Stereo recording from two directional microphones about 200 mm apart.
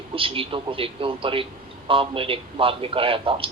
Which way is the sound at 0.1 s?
25° right (ahead or behind).